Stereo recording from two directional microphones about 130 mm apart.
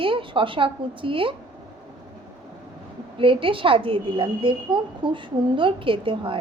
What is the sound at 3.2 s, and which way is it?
A woman's voice, 40° right (ahead or behind).